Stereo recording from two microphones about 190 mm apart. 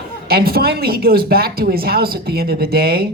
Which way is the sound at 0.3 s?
55° right (ahead or behind).